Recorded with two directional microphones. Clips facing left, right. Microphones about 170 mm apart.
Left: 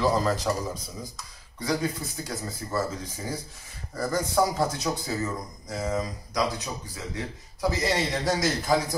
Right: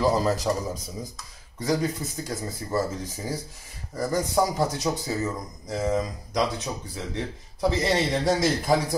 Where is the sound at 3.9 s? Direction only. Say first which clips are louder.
Right 2 dB; 15° right (ahead or behind).